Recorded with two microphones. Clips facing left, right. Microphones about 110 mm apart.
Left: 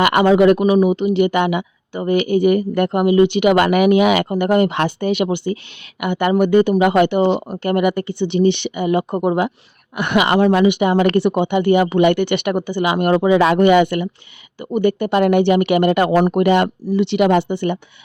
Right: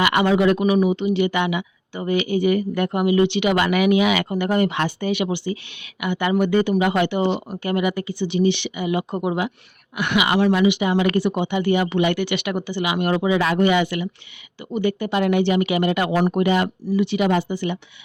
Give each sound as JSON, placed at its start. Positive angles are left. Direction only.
{"t": 0.0, "sound": "speech", "side_deg": 45}
{"t": 0.6, "sound": "speech", "side_deg": 35}
{"t": 0.9, "sound": "speech", "side_deg": 50}
{"t": 16.5, "sound": "speech", "side_deg": 65}